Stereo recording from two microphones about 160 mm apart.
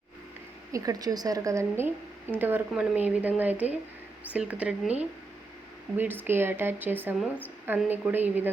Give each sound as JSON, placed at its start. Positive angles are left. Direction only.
{"t": 0.7, "sound": "a woman's voice", "side_deg": -20}
{"t": 6.0, "sound": "speech", "side_deg": -10}